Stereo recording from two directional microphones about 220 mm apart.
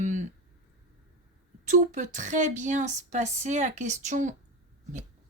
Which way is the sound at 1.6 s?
35° right (ahead or behind).